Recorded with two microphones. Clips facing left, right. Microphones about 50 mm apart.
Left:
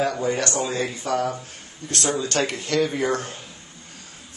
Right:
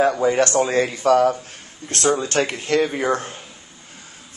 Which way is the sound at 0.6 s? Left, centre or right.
Right.